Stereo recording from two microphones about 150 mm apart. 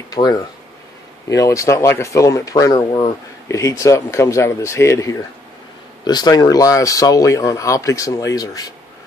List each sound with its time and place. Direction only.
0.1 s speech: 25° left (ahead or behind)